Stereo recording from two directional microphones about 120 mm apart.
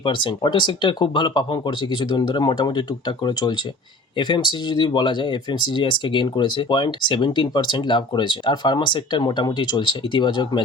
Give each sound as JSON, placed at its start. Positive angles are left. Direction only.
{"t": 0.0, "sound": "speech", "side_deg": 45}
{"t": 4.2, "sound": "speech", "side_deg": 40}